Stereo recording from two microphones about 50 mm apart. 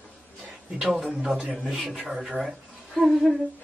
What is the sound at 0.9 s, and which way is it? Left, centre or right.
Speech, centre.